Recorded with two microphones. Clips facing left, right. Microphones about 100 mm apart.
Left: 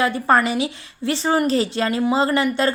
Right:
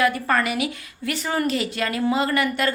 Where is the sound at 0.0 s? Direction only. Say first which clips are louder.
Left 3 dB; 25° left (ahead or behind).